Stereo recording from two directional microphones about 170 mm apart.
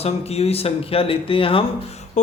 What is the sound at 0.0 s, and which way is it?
Speech, 35° left (ahead or behind).